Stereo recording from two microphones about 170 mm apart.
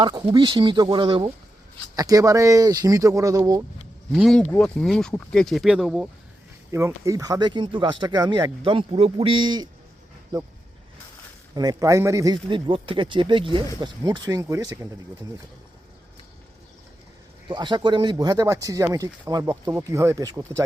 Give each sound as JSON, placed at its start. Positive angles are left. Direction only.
{"t": 0.0, "sound": "speech", "side_deg": -25}
{"t": 4.1, "sound": "speech", "side_deg": 5}
{"t": 6.7, "sound": "speech", "side_deg": -15}
{"t": 11.5, "sound": "speech", "side_deg": -20}
{"t": 17.5, "sound": "speech", "side_deg": -25}